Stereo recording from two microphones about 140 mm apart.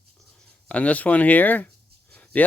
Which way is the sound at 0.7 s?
10° left (ahead or behind).